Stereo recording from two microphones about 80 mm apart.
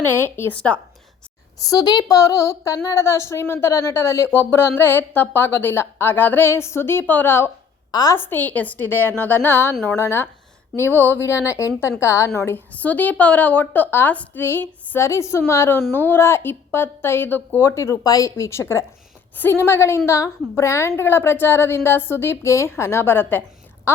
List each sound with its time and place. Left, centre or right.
0.0 s a woman's voice: left
1.5 s a woman's voice: left
1.8 s a woman's voice: left
2.0 s a woman's voice: left
7.9 s a woman's voice: left
8.1 s a woman's voice: left
12.5 s a woman's voice: left
18.0 s speech: left
18.3 s speech: left